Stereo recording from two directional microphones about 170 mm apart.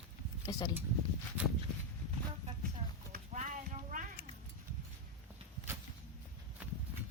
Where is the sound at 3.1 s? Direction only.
45° right (ahead or behind).